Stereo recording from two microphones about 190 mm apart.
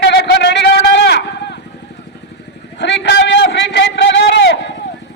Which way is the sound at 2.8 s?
65° left (ahead or behind).